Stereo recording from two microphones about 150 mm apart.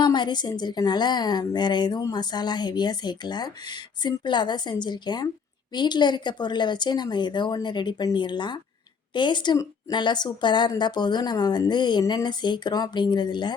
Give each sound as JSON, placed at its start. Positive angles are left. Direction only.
{"t": 0.0, "sound": "a woman's voice", "side_deg": 30}